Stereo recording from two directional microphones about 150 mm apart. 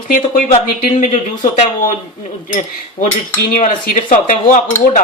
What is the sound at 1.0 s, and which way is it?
Speech, 55° left (ahead or behind).